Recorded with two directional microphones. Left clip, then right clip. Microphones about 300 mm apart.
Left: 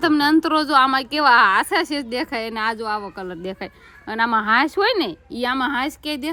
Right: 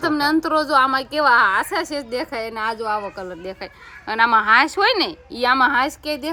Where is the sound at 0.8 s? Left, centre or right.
Left.